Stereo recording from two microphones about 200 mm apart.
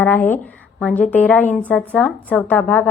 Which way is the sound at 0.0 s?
10° left (ahead or behind).